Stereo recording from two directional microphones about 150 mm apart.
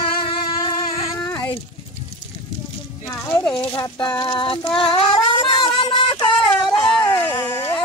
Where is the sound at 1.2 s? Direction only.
15° left (ahead or behind).